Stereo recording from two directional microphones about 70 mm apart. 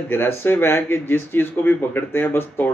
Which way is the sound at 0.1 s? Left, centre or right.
Left.